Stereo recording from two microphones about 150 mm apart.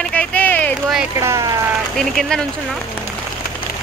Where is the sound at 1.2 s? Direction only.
20° right (ahead or behind).